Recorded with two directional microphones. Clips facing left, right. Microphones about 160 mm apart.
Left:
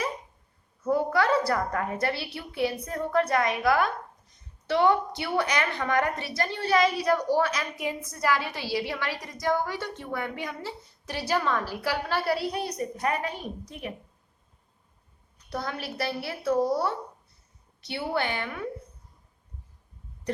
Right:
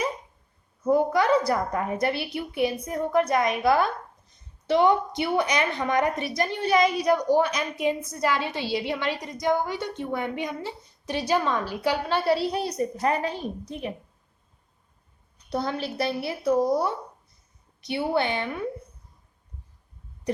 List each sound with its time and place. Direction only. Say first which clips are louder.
0.9 s a woman's voice: right 3 dB; 20° right (ahead or behind)
15.4 s a woman's voice: right 5 dB; 25° right (ahead or behind)